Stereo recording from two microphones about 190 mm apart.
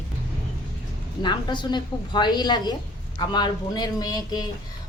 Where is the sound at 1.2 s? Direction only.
25° left (ahead or behind).